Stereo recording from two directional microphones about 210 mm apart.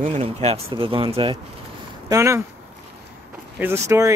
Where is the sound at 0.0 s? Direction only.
30° right (ahead or behind).